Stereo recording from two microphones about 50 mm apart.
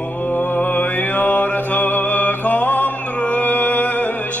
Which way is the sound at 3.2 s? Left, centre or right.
Left.